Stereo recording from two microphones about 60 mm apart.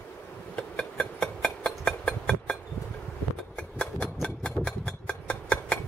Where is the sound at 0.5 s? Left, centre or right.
Centre.